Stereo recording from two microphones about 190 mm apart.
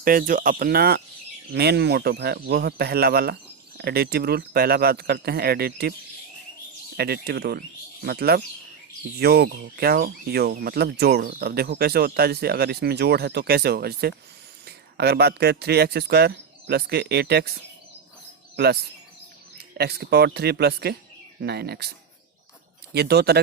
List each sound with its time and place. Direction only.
0.0 s speech: 50° right (ahead or behind)
6.9 s speech: 55° right (ahead or behind)
18.5 s speech: 60° right (ahead or behind)
23.0 s speech: 60° right (ahead or behind)